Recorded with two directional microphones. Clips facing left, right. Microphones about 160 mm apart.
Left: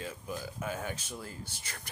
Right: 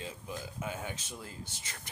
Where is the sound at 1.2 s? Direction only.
20° right (ahead or behind).